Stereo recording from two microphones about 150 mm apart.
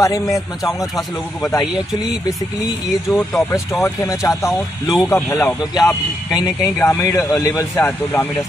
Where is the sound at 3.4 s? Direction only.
20° left (ahead or behind).